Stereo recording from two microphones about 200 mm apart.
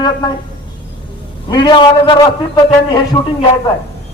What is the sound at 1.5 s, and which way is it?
Speech, 25° left (ahead or behind).